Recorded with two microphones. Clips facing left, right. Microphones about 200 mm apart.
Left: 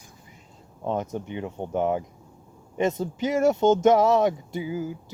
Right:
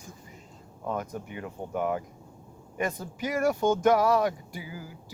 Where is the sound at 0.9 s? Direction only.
25° left (ahead or behind).